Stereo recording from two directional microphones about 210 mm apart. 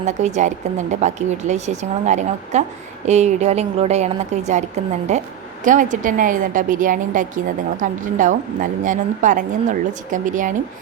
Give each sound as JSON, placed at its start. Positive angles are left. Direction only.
{"t": 0.0, "sound": "a woman's voice", "side_deg": -35}